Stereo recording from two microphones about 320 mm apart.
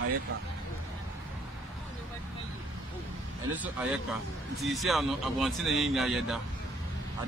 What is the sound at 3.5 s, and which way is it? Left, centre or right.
A man's voice, centre.